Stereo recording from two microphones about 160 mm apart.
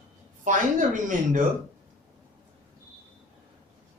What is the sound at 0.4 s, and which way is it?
Speech, 55° right (ahead or behind).